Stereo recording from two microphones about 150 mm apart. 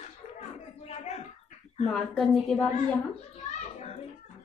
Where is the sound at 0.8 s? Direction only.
45° left (ahead or behind).